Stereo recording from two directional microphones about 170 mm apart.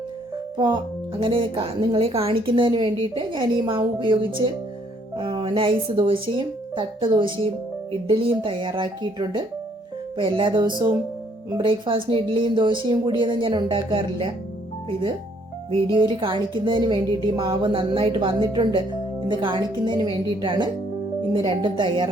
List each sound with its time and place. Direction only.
0.5 s a woman's voice: 25° right (ahead or behind)
15.7 s a woman's voice: 30° right (ahead or behind)